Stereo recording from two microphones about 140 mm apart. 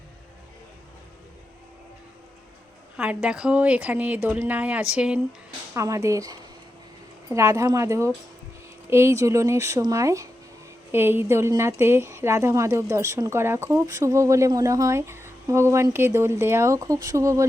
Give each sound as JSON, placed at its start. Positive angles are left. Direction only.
{"t": 3.0, "sound": "a woman's voice", "side_deg": -5}
{"t": 5.7, "sound": "speech", "side_deg": -20}